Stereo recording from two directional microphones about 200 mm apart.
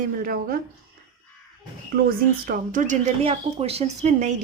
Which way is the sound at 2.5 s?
40° right (ahead or behind).